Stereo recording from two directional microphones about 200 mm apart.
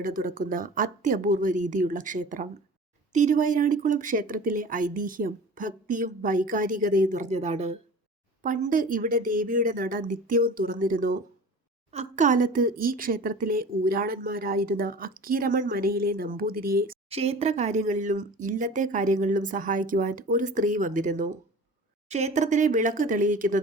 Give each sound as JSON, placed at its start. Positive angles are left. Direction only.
{"t": 0.0, "sound": "a woman's voice", "side_deg": -40}
{"t": 17.1, "sound": "speech", "side_deg": -30}